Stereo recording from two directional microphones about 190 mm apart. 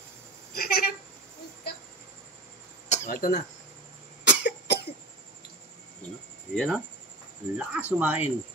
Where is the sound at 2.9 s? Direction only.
40° left (ahead or behind).